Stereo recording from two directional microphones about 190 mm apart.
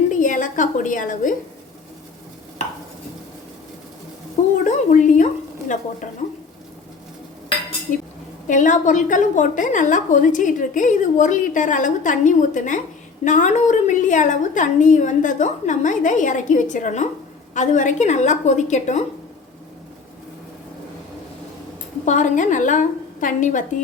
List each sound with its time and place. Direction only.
0.1 s a sound: 45° left (ahead or behind)
4.6 s speech: 40° left (ahead or behind)
8.4 s a woman's voice: 40° left (ahead or behind)
22.0 s a woman's voice: 40° left (ahead or behind)